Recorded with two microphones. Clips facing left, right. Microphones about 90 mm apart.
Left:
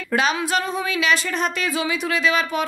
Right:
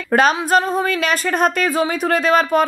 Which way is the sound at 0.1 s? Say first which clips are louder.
Right 6 dB; 45° right (ahead or behind).